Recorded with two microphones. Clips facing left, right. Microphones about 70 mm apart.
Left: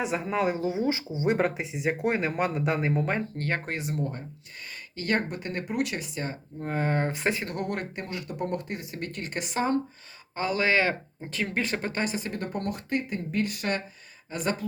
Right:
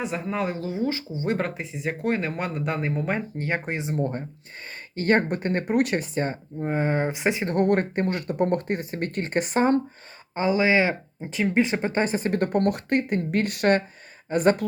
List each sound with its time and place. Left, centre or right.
0.0 s speech: centre
3.3 s speech: centre
4.7 s speech: right
6.6 s speech: centre
7.5 s speech: right
10.3 s speech: right